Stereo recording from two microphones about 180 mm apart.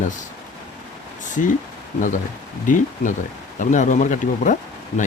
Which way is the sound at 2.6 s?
45° left (ahead or behind).